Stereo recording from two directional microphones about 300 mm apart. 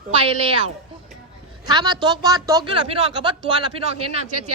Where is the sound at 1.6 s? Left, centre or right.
Centre.